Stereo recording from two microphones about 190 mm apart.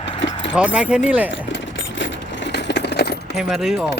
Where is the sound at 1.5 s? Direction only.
75° left (ahead or behind); by 3.3 s 60° left (ahead or behind).